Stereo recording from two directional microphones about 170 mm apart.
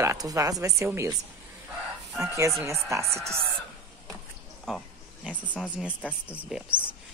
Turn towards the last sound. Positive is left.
turn(degrees=-5)  # may be behind; listen again after turning